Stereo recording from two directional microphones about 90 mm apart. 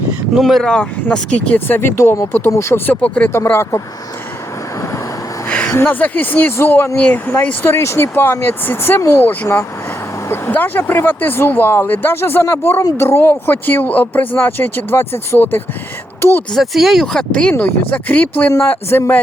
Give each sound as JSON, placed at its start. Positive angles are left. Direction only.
{"t": 0.3, "sound": "speech", "side_deg": 0}
{"t": 1.5, "sound": "speech", "side_deg": 25}
{"t": 3.5, "sound": "speech", "side_deg": 30}
{"t": 5.5, "sound": "a sound", "side_deg": 15}
{"t": 5.7, "sound": "speech", "side_deg": 20}
{"t": 16.5, "sound": "speech", "side_deg": 0}